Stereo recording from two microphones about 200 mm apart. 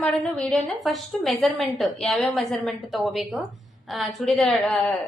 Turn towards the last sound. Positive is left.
turn(degrees=5)  # may be behind; listen again after turning